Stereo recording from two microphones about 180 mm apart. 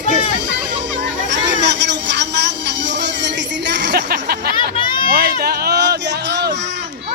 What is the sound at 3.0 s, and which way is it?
Music, 75° right (ahead or behind).